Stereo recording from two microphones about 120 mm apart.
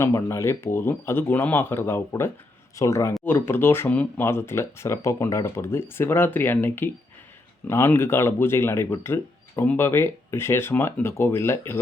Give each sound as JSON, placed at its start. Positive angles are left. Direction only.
{"t": 0.0, "sound": "speech", "side_deg": 25}